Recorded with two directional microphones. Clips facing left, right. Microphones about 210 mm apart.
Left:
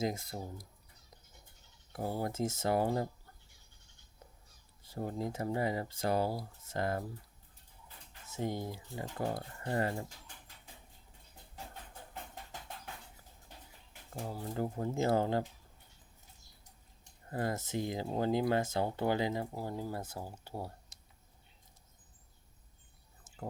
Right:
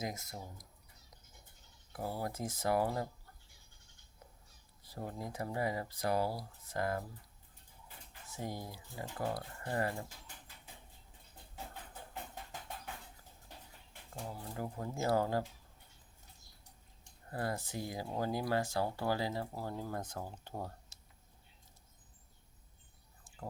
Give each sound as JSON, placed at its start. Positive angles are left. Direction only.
{"t": 0.0, "sound": "speech", "side_deg": 30}
{"t": 1.9, "sound": "speech", "side_deg": 25}
{"t": 4.8, "sound": "speech", "side_deg": 30}
{"t": 8.3, "sound": "speech", "side_deg": 25}
{"t": 12.3, "sound": "music", "side_deg": 0}
{"t": 14.5, "sound": "speech", "side_deg": 30}
{"t": 17.3, "sound": "speech", "side_deg": 20}